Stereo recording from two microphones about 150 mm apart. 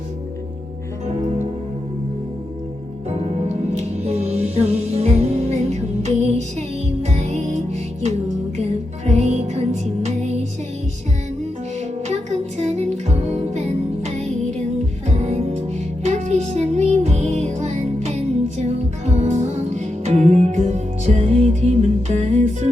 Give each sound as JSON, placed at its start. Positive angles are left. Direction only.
{"t": 3.7, "sound": "music", "side_deg": -45}
{"t": 12.0, "sound": "music", "side_deg": -50}